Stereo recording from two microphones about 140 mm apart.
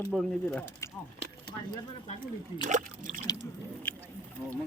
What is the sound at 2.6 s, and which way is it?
Speech, 65° right (ahead or behind).